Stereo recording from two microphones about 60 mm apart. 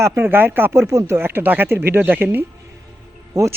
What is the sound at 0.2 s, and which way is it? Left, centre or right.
Speech, right.